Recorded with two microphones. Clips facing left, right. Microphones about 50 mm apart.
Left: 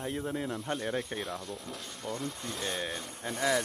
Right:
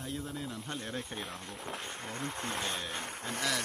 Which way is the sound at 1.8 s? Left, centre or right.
Right.